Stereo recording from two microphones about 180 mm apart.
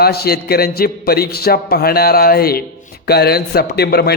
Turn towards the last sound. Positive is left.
turn(degrees=60)  # may be behind; listen again after turning